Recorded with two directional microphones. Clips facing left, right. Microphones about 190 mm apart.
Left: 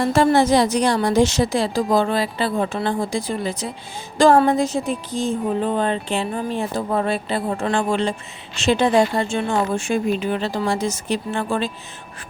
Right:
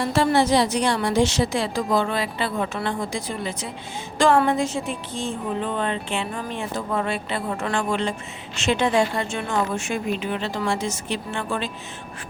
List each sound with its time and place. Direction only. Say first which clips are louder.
0.0 s speech: left 4 dB; 45° left (ahead or behind)